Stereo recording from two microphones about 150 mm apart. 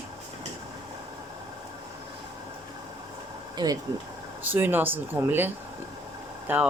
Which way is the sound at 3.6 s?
30° right (ahead or behind).